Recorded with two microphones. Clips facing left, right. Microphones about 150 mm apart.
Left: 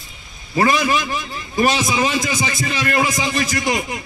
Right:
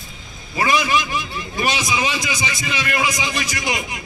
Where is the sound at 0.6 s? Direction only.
40° left (ahead or behind).